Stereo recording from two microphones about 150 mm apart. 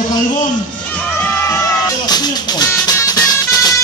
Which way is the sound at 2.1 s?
25° left (ahead or behind).